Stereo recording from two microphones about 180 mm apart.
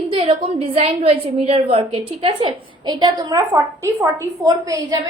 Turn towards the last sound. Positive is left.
turn(degrees=-20)  # may be behind; listen again after turning